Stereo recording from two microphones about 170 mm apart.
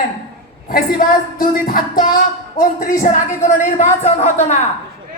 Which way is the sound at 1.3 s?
55° left (ahead or behind).